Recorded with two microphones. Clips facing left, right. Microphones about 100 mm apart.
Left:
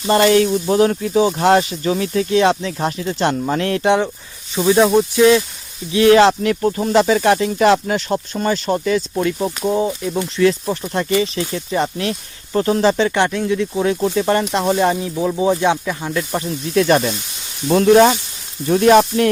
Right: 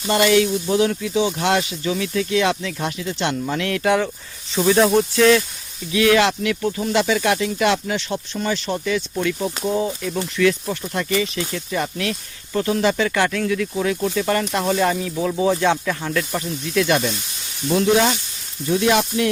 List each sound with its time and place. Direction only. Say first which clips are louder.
0.1 s speech: left 4 dB; 35° left (ahead or behind); by 5.4 s 15° left (ahead or behind)
5.9 s speech: left 6 dB; 30° left (ahead or behind); by 16.2 s 15° left (ahead or behind)
16.3 s speech: left 4 dB; 30° left (ahead or behind)
17.7 s speech: left 6 dB; 50° left (ahead or behind)